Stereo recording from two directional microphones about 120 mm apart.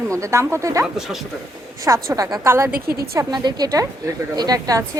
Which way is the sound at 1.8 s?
25° right (ahead or behind).